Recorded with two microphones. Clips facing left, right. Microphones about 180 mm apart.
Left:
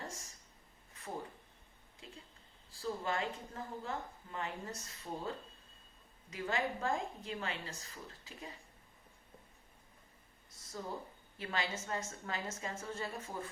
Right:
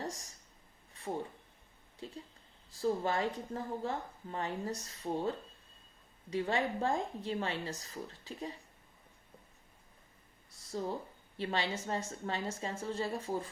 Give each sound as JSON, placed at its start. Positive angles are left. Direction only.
{"t": 0.0, "sound": "a sound", "side_deg": -40}
{"t": 2.6, "sound": "a woman's voice", "side_deg": -35}
{"t": 6.3, "sound": "a woman's voice", "side_deg": -30}
{"t": 10.7, "sound": "a woman's voice", "side_deg": -30}